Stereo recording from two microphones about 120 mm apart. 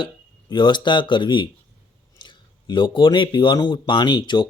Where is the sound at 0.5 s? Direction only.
40° left (ahead or behind).